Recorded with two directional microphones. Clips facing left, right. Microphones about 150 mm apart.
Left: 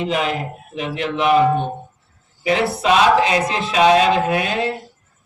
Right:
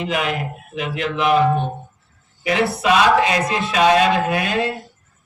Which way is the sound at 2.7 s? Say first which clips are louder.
Left 1 dB; 25° left (ahead or behind).